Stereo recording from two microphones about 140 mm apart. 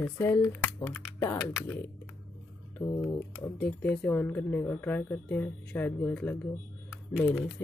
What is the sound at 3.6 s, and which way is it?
Speech, 10° left (ahead or behind).